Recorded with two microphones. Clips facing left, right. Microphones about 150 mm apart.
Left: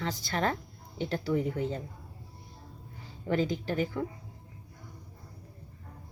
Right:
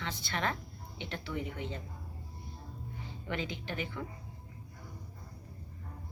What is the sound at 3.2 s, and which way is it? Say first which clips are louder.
Speech: left 9 dB; 40° left (ahead or behind).